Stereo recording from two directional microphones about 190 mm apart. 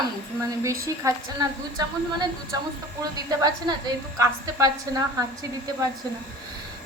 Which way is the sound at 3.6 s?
20° right (ahead or behind).